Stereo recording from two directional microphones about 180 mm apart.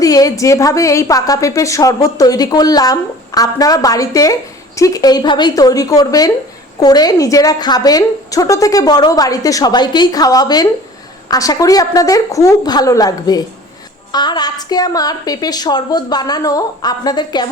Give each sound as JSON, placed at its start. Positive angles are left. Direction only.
{"t": 0.0, "sound": "a woman's voice", "side_deg": 20}